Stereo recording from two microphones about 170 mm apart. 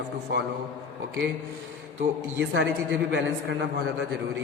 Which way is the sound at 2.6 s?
90° right.